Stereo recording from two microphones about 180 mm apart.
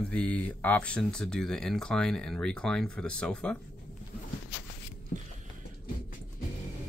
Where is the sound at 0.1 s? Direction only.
5° left (ahead or behind).